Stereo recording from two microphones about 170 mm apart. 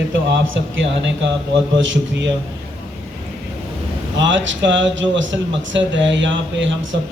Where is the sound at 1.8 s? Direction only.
90° right.